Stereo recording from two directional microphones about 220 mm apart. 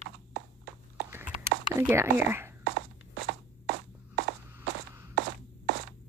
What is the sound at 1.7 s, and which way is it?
Speech, 10° right (ahead or behind).